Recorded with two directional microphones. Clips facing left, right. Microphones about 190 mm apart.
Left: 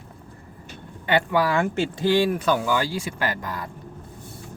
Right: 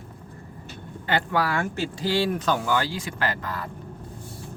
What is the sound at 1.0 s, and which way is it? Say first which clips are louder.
Speech: left 4 dB; 15° left (ahead or behind).